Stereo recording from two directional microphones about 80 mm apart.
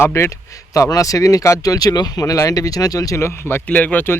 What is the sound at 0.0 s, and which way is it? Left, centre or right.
Speech, left.